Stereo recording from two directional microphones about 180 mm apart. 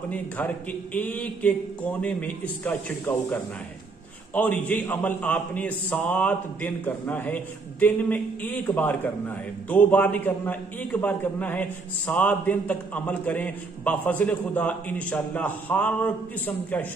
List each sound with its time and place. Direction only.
0.1 s a man's voice: 10° left (ahead or behind)
4.3 s a man's voice: 10° left (ahead or behind)